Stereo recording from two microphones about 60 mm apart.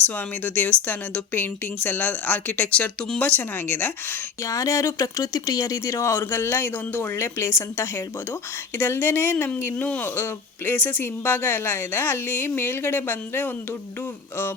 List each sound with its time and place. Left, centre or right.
0.2 s speech: left
4.4 s speech: left
8.9 s speech: left
10.2 s speech: left